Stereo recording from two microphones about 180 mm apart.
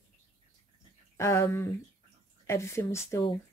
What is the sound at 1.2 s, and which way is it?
A woman's voice, 15° left (ahead or behind).